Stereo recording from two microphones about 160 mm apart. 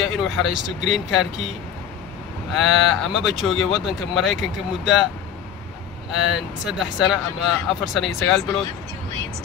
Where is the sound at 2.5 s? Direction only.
Centre (ahead or behind).